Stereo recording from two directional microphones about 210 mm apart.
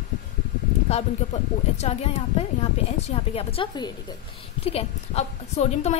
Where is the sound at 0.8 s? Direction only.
30° left (ahead or behind).